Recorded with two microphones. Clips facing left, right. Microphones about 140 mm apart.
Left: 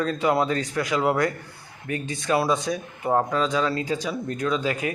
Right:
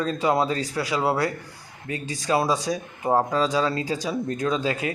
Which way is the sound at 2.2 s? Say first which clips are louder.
Even; 20° right (ahead or behind).